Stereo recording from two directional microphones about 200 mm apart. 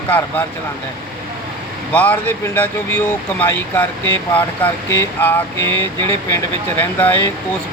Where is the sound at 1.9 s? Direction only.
10° left (ahead or behind).